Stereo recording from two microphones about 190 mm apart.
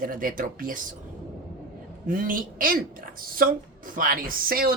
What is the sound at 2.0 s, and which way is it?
A woman's voice, 45° right (ahead or behind).